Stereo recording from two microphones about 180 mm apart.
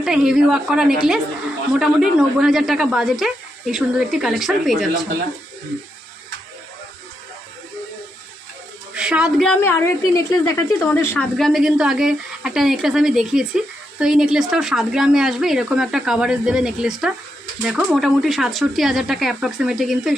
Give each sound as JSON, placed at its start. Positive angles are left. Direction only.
{"t": 0.0, "sound": "speech", "side_deg": -5}
{"t": 9.0, "sound": "speech", "side_deg": -5}
{"t": 9.8, "sound": "speech", "side_deg": 20}
{"t": 11.3, "sound": "speech", "side_deg": 0}